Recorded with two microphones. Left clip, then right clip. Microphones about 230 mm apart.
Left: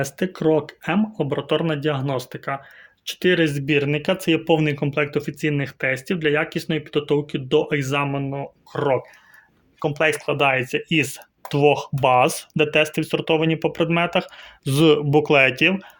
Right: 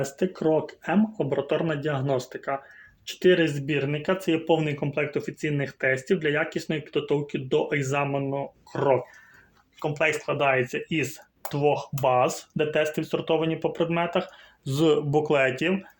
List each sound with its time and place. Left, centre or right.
0.0 s speech: left